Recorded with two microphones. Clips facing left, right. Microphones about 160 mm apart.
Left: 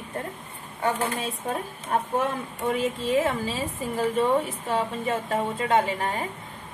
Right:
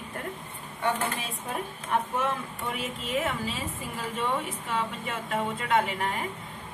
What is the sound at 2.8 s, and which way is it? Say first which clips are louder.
Speech: left 7 dB; 35° left (ahead or behind).